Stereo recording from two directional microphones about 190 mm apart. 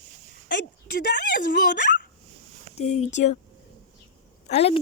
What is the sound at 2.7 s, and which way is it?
Speech, 35° left (ahead or behind).